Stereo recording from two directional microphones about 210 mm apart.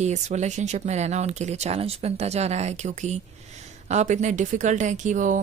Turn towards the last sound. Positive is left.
turn(degrees=-35)  # may be behind; listen again after turning